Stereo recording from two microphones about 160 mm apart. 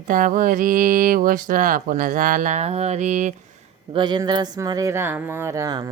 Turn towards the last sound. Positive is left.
turn(degrees=-25)  # may be behind; listen again after turning